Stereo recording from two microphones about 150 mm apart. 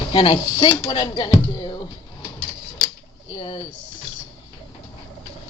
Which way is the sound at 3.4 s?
35° left (ahead or behind).